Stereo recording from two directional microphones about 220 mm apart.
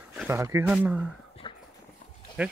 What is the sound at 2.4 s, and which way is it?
Speech, 5° right (ahead or behind).